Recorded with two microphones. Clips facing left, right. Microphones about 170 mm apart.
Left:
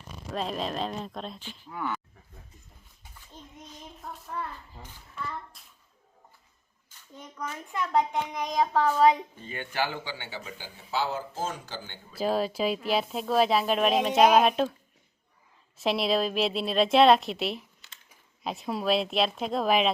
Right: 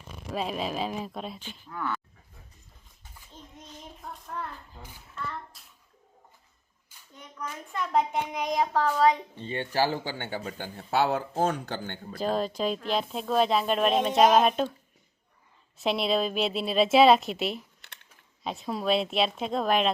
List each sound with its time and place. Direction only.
0.1 s speech: 5° right (ahead or behind)
1.7 s speech: 15° left (ahead or behind)
4.3 s speech: centre (ahead or behind)
5.5 s bathtub: centre (ahead or behind)
6.9 s a sound: 10° right (ahead or behind)
7.9 s speech: 5° right (ahead or behind)
8.7 s speech: 10° left (ahead or behind)
9.3 s a man's voice: 30° right (ahead or behind); by 11.9 s 60° right (ahead or behind)
12.1 s speech: 5° left (ahead or behind)
15.8 s speech: centre (ahead or behind)
17.8 s typing: 65° right (ahead or behind)
18.4 s speech: centre (ahead or behind)